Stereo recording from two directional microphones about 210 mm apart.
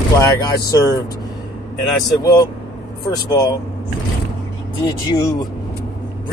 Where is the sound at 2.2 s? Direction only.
15° left (ahead or behind).